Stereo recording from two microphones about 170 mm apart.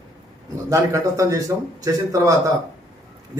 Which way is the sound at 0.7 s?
20° right (ahead or behind).